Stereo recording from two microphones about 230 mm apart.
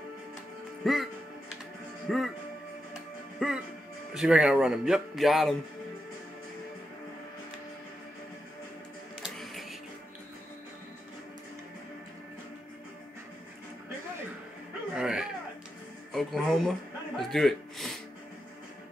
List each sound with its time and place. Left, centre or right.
0.8 s speech: centre
2.0 s music: centre
3.4 s music: centre
4.1 s speech: centre
9.2 s music: centre
15.0 s a sound: centre
16.1 s speech: centre
17.3 s gasp: centre